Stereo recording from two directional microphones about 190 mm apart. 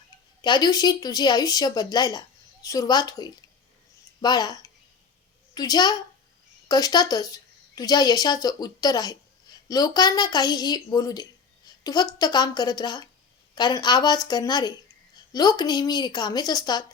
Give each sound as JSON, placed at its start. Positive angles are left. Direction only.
{"t": 0.4, "sound": "speech", "side_deg": 20}